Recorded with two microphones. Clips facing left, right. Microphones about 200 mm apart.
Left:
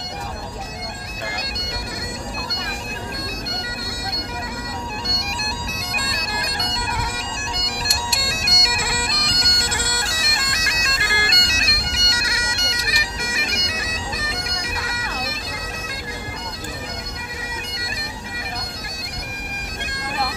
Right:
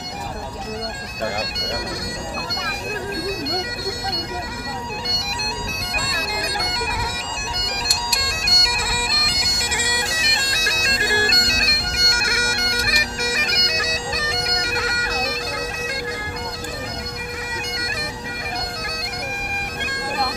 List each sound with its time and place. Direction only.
5.9 s bagpipes: 5° right (ahead or behind)
8.2 s bagpipes: centre (ahead or behind); by 10.4 s 15° right (ahead or behind)
10.4 s bagpipes: 35° right (ahead or behind)